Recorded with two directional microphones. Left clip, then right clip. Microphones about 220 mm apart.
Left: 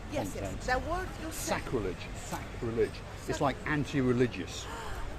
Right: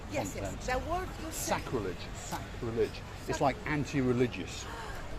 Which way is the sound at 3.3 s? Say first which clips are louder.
Even; centre (ahead or behind).